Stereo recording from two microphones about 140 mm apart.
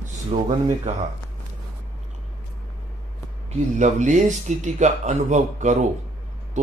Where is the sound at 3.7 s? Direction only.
60° right (ahead or behind).